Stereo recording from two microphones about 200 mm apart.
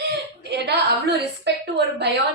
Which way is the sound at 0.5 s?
55° right (ahead or behind).